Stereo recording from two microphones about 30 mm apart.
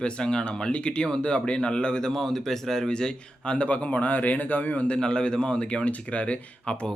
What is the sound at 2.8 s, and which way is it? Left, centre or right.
Speech, left.